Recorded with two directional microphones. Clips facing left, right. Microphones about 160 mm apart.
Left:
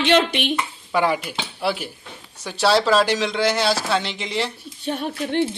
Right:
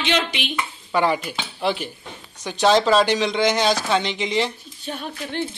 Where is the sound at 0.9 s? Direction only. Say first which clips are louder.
Even; 10° left (ahead or behind).